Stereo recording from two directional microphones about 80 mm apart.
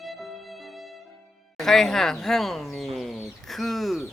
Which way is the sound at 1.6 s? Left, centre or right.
Centre.